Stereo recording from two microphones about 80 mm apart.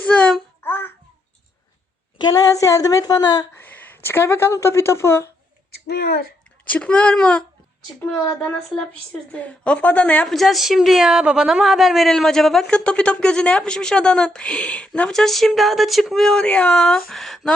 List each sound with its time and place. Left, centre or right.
0.0 s child singing: centre
0.6 s babbling: left
2.3 s a sound: left
3.6 s speech: left
6.7 s speech: centre
10.2 s a woman's voice: centre